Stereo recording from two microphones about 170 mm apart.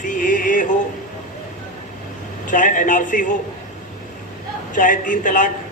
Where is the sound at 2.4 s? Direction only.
50° left (ahead or behind).